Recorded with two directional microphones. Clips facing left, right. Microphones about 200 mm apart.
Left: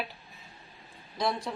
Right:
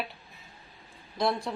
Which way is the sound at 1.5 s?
Centre (ahead or behind).